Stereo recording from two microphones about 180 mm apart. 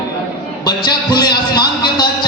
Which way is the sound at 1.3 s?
25° left (ahead or behind).